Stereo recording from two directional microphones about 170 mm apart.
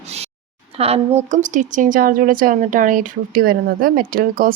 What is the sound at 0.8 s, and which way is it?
A woman's voice, 35° right (ahead or behind).